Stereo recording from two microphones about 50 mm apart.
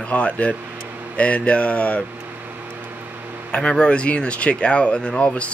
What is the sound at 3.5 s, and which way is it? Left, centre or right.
Speech, centre.